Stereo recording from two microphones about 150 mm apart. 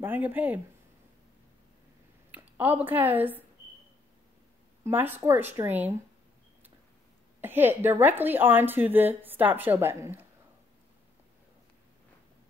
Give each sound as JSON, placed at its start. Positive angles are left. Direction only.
{"t": 0.0, "sound": "speech", "side_deg": -15}
{"t": 2.3, "sound": "a woman's voice", "side_deg": -10}
{"t": 4.8, "sound": "a woman's voice", "side_deg": -15}
{"t": 7.3, "sound": "a woman's voice", "side_deg": -15}